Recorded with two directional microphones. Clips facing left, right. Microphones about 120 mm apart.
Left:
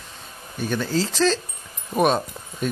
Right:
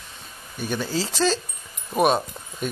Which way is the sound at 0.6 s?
5° right (ahead or behind).